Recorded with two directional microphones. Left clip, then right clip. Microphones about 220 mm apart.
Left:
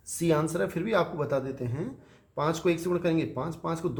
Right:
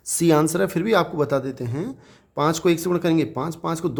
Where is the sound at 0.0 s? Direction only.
50° right (ahead or behind).